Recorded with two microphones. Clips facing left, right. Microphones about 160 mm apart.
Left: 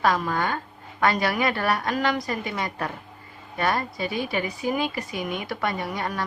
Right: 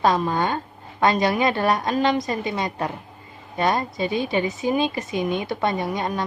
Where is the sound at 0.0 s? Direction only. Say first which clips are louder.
Right 3 dB; 25° right (ahead or behind).